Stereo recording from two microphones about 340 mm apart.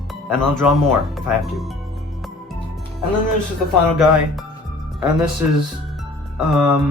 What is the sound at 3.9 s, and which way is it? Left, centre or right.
Speech, centre.